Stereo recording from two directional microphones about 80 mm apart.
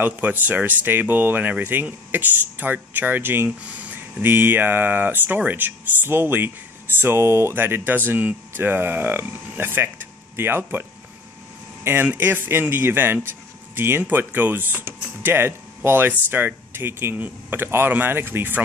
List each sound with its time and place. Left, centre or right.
0.0 s speech: right